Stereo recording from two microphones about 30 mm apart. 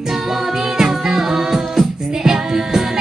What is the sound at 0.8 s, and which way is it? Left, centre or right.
Music, centre.